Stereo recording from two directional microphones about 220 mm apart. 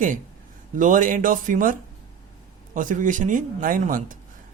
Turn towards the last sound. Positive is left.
turn(degrees=-35)  # may be behind; listen again after turning